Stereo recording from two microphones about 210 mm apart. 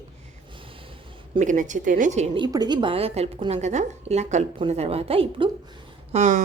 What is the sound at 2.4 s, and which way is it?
A woman's voice, 20° right (ahead or behind).